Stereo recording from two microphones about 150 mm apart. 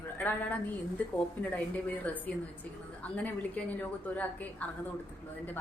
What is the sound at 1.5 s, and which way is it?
A woman's voice, 10° left (ahead or behind).